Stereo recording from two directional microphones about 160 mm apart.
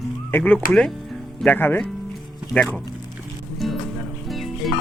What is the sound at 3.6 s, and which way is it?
Music, centre (ahead or behind).